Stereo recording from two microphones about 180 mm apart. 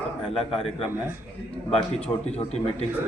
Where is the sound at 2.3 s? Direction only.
35° left (ahead or behind).